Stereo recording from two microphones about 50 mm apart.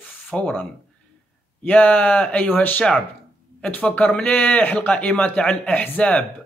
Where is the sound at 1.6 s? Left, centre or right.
Left.